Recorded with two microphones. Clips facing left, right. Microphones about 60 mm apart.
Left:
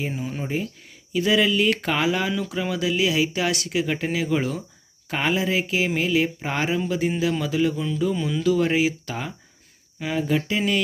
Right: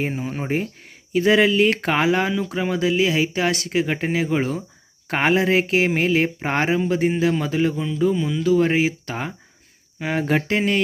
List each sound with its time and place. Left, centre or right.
0.0 s speech: right
5.0 s speech: right
7.7 s speech: right
8.1 s speech: centre
8.4 s speech: right
10.0 s speech: right